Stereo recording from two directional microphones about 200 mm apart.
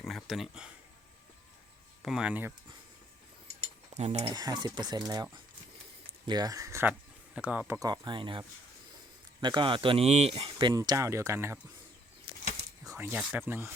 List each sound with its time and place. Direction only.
0.0 s speech: centre (ahead or behind)
2.0 s speech: 5° right (ahead or behind)
3.9 s cutlery: 30° right (ahead or behind)
4.3 s speech: 20° right (ahead or behind)
12.8 s speech: 15° right (ahead or behind)